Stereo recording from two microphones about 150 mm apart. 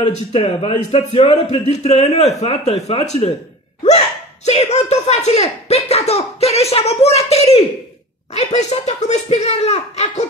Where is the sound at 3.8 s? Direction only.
45° left (ahead or behind).